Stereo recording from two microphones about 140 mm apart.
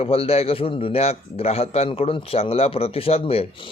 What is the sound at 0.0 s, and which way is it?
Speech, 45° left (ahead or behind).